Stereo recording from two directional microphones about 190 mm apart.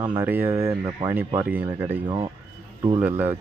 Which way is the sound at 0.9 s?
25° right (ahead or behind).